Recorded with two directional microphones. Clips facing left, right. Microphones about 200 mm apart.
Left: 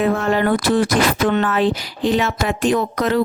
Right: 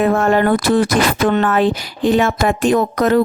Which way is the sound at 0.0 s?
50° right (ahead or behind).